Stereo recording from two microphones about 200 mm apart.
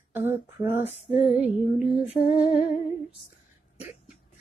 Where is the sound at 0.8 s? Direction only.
30° left (ahead or behind).